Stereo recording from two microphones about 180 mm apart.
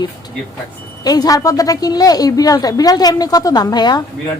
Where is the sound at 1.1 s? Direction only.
20° left (ahead or behind).